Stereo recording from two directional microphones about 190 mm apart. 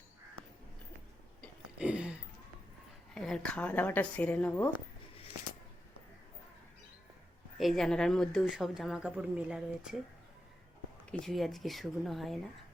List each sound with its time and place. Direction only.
1.8 s a sound: 5° right (ahead or behind)
3.2 s speech: 5° left (ahead or behind)
7.6 s speech: centre (ahead or behind)
11.1 s speech: centre (ahead or behind)